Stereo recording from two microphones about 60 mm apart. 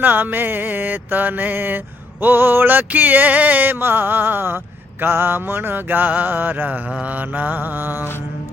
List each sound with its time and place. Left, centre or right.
0.0 s music: right
6.9 s mantra: right